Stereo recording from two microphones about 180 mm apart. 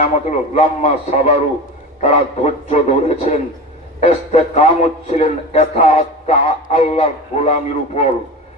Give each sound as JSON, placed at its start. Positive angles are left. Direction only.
{"t": 0.0, "sound": "a man's voice", "side_deg": 40}